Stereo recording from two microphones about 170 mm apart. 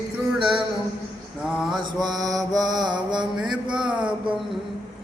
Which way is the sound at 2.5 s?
25° right (ahead or behind).